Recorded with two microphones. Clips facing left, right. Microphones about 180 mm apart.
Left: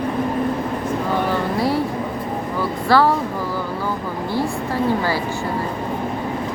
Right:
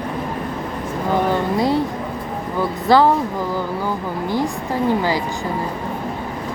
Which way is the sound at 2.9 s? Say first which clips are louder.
Right 2 dB; 20° right (ahead or behind).